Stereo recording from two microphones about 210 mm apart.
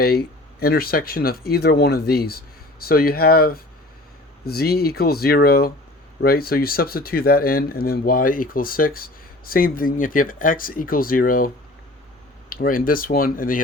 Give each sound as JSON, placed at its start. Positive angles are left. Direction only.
{"t": 0.0, "sound": "speech", "side_deg": 50}